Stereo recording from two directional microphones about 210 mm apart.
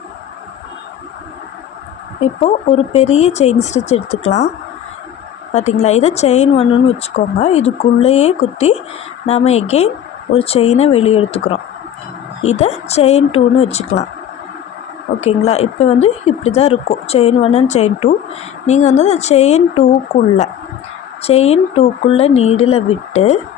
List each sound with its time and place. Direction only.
2.2 s speech: 30° left (ahead or behind)
5.5 s speech: 30° left (ahead or behind)
15.2 s speech: 30° left (ahead or behind)